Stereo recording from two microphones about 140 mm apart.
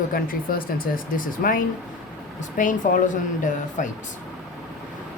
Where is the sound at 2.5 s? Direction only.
65° left (ahead or behind).